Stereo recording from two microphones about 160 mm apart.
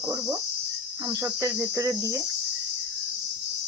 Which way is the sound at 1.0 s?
20° right (ahead or behind).